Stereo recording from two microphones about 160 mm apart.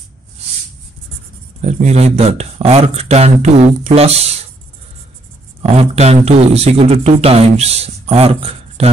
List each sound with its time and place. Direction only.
1.6 s speech: 40° right (ahead or behind)
5.6 s speech: 40° right (ahead or behind)